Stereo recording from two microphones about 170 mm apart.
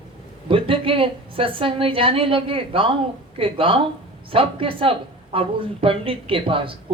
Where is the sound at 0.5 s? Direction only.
30° right (ahead or behind).